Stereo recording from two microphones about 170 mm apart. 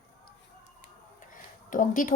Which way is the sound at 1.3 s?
50° left (ahead or behind).